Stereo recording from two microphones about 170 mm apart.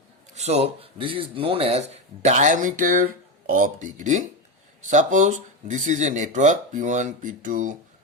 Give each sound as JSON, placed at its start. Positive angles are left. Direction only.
{"t": 0.3, "sound": "speech", "side_deg": -40}